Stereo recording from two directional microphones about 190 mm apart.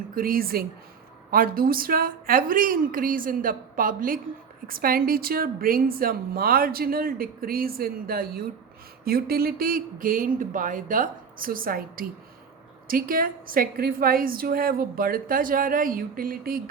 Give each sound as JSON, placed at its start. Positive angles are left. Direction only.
{"t": 0.1, "sound": "a woman's voice", "side_deg": -50}